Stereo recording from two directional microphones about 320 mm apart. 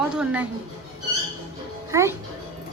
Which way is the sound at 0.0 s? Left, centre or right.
Centre.